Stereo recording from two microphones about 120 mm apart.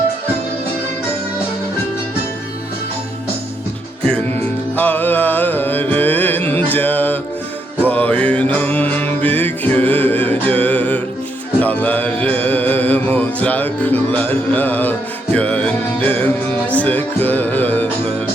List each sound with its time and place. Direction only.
4.3 s music: 20° left (ahead or behind)